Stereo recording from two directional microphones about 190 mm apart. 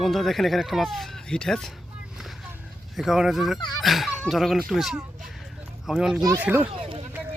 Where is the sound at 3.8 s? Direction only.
Centre (ahead or behind).